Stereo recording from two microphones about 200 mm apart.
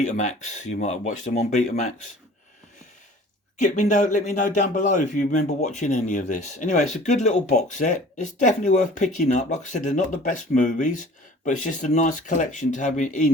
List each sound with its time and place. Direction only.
0.0 s speech: 35° left (ahead or behind)
3.6 s speech: 40° left (ahead or behind)